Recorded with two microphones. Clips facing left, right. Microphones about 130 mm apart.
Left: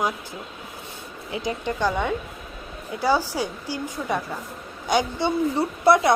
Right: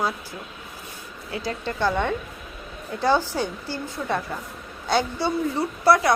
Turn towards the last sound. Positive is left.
turn(degrees=20)  # may be behind; listen again after turning